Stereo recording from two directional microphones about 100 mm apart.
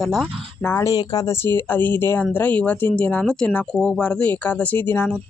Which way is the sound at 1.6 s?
20° left (ahead or behind).